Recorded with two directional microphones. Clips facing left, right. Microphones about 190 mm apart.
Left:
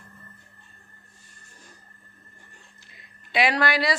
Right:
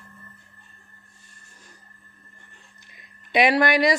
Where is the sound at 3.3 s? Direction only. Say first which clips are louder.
Right 4 dB; 20° right (ahead or behind).